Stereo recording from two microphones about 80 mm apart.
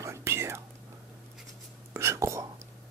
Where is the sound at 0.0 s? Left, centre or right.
Right.